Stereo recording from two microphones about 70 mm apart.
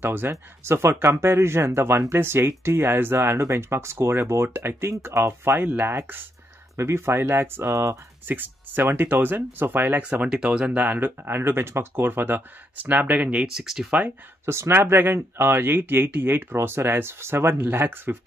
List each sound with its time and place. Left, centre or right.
0.0 s speech: right
8.3 s speech: right; by 10.8 s centre
10.8 s speech: right
13.5 s speech: centre
14.4 s speech: right